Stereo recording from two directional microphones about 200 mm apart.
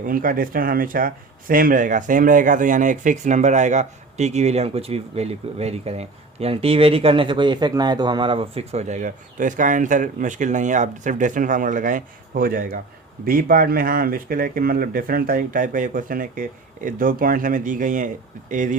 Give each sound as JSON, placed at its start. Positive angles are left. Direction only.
{"t": 0.0, "sound": "speech", "side_deg": -45}